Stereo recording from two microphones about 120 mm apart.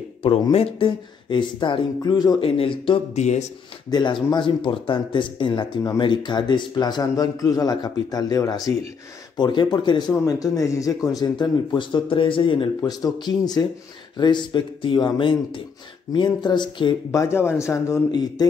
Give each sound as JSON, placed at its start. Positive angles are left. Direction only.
{"t": 0.2, "sound": "speech", "side_deg": 55}
{"t": 2.4, "sound": "speech", "side_deg": 50}
{"t": 3.2, "sound": "speech", "side_deg": 70}
{"t": 3.9, "sound": "speech", "side_deg": 40}
{"t": 12.8, "sound": "speech", "side_deg": 35}
{"t": 17.1, "sound": "a man's voice", "side_deg": 25}